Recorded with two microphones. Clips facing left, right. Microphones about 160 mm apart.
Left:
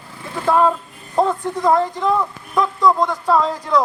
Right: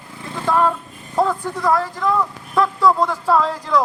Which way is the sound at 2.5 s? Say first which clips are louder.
Even; 5° right (ahead or behind).